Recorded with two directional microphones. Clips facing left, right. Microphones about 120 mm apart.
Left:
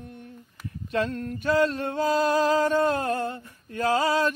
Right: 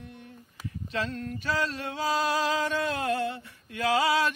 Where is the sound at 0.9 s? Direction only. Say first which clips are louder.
Left 5 dB; 50° left (ahead or behind).